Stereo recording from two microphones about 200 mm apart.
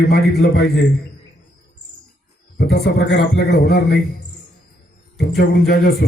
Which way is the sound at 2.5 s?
55° left (ahead or behind).